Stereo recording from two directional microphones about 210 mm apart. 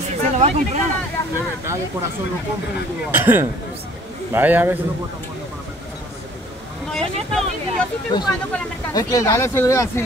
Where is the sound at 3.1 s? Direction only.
10° right (ahead or behind).